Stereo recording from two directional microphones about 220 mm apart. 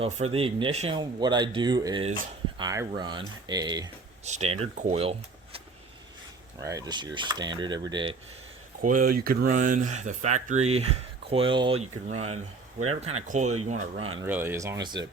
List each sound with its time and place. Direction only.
0.0 s speech: 25° right (ahead or behind)
4.3 s speech: 30° right (ahead or behind)
6.6 s speech: 15° right (ahead or behind)
9.2 s speech: 40° right (ahead or behind)
14.2 s speech: 10° right (ahead or behind)